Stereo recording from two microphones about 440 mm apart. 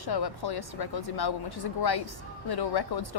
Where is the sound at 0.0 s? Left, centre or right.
Left.